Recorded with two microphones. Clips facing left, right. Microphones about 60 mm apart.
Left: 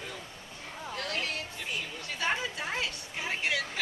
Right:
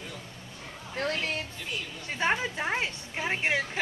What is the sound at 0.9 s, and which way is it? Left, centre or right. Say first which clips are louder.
A woman's voice: right 5 dB; right.